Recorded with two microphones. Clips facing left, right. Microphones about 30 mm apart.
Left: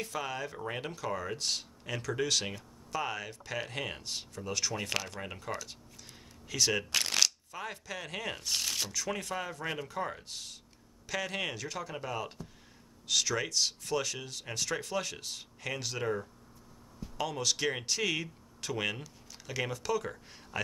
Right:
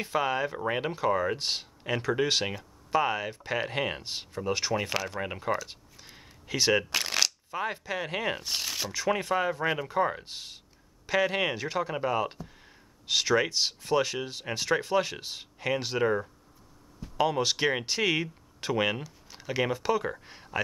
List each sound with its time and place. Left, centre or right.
0.0 s speech: right
4.7 s speech: centre
5.2 s speech: right
5.7 s a sound: right
6.9 s shuffling cards: centre
7.5 s speech: right
8.9 s speech: right